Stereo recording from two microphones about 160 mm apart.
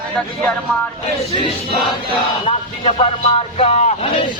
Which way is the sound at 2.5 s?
45° left (ahead or behind).